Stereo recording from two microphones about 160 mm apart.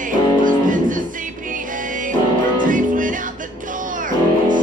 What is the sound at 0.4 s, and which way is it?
Music, 55° right (ahead or behind).